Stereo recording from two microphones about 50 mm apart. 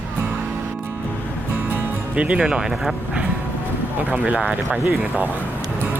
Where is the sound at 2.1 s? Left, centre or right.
Right.